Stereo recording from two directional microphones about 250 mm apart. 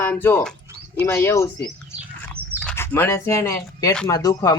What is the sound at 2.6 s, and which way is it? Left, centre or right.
Speech, centre.